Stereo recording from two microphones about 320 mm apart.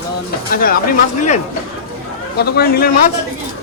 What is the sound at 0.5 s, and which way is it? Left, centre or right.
Speech, left.